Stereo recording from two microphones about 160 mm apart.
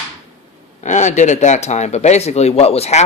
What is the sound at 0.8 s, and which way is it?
A man's voice, 50° left (ahead or behind).